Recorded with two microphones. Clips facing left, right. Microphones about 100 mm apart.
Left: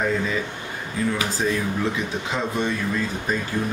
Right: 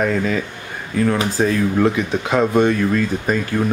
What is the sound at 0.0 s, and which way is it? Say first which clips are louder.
Speech: right 5 dB; 60° right (ahead or behind).